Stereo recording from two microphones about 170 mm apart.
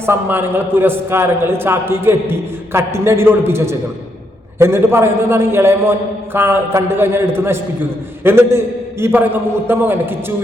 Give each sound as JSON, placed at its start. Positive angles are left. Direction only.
{"t": 0.0, "sound": "a man's voice", "side_deg": -15}